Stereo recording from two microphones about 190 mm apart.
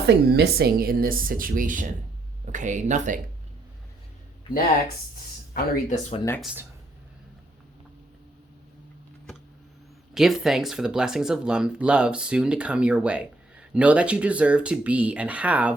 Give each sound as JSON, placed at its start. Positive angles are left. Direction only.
{"t": 0.0, "sound": "a woman's voice", "side_deg": -60}
{"t": 5.7, "sound": "speech", "side_deg": 40}
{"t": 6.4, "sound": "speech", "side_deg": -5}
{"t": 10.2, "sound": "speech", "side_deg": 0}